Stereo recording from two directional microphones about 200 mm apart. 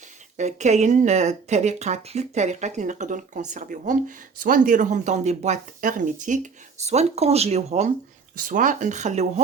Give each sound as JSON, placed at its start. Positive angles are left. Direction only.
{"t": 0.3, "sound": "speech", "side_deg": -35}